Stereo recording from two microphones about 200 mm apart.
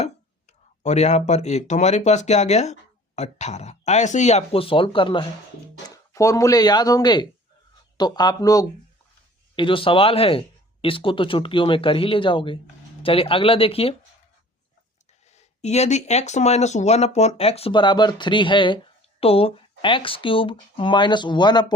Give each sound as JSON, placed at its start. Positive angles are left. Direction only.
{"t": 0.0, "sound": "speech", "side_deg": 35}
{"t": 15.3, "sound": "speech", "side_deg": 35}